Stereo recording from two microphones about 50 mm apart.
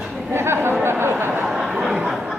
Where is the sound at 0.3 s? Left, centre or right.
Right.